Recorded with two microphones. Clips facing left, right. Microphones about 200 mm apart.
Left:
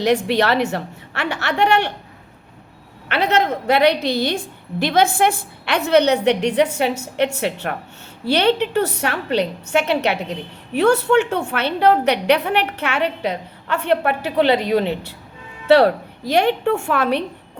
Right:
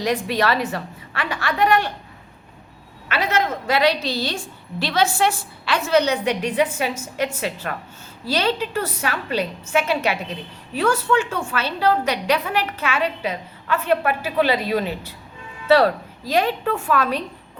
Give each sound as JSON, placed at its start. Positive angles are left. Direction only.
{"t": 0.0, "sound": "a woman's voice", "side_deg": 70}
{"t": 3.1, "sound": "a woman's voice", "side_deg": 65}